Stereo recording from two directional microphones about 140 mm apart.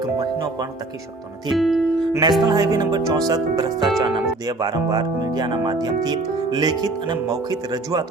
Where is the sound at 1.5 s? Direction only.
Centre (ahead or behind).